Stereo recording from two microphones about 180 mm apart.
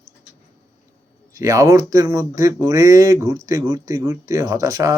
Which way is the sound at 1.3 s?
20° right (ahead or behind).